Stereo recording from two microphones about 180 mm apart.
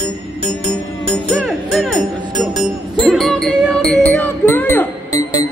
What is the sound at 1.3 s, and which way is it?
Music, centre (ahead or behind).